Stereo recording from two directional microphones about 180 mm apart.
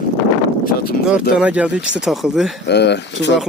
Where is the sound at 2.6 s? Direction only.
70° left (ahead or behind).